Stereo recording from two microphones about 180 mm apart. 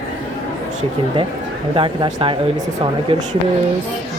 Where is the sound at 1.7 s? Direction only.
25° right (ahead or behind).